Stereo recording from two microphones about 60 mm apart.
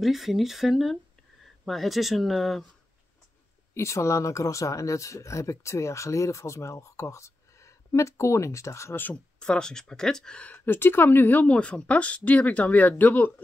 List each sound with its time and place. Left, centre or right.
0.0 s speech: centre
3.7 s speech: left
9.1 s speech: centre
10.5 s speech: left